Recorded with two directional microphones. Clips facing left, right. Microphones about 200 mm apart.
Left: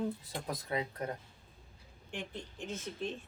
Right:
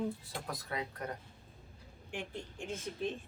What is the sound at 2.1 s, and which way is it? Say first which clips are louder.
Speech: right 1 dB; 10° right (ahead or behind).